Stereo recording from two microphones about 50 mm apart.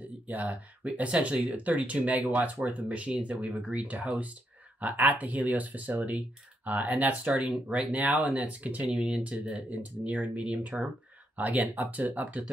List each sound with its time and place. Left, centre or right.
0.3 s speech: right